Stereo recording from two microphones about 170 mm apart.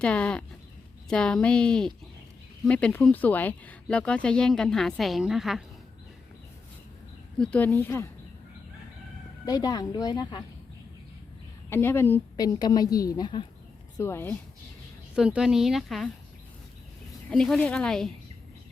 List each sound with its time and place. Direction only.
0.0 s a woman's voice: 5° left (ahead or behind)
7.3 s a woman's voice: 5° left (ahead or behind)
9.5 s a woman's voice: 20° left (ahead or behind)
11.7 s a woman's voice: 15° left (ahead or behind)
14.0 s a woman's voice: 15° left (ahead or behind)
15.1 s speech: 5° right (ahead or behind)
17.2 s speech: 5° left (ahead or behind)